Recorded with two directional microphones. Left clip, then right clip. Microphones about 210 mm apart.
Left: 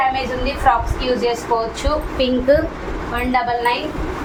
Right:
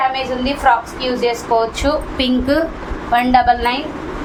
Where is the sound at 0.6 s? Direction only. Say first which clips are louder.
Right 1 dB; 50° right (ahead or behind).